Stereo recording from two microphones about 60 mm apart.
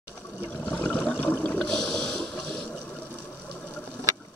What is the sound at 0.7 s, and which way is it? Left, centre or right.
Water, left.